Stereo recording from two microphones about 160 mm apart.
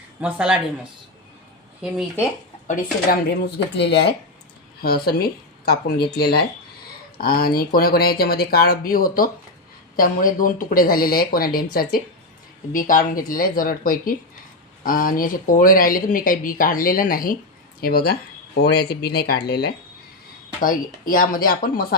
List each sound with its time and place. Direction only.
0.2 s speech: 10° right (ahead or behind)
2.6 s speech: 75° left (ahead or behind)
4.8 s speech: 70° left (ahead or behind)
7.2 s speech: 70° left (ahead or behind)
13.1 s speech: 60° left (ahead or behind); by 19.7 s 85° left
20.6 s speech: 60° left (ahead or behind)